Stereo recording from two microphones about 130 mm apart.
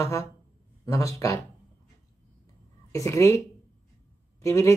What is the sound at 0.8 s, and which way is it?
Speech, 25° left (ahead or behind).